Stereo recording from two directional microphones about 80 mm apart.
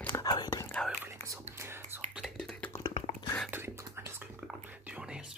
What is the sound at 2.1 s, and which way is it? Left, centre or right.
Whispering, centre.